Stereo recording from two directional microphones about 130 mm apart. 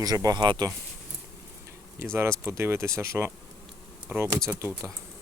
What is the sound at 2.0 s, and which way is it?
Speech, 20° right (ahead or behind).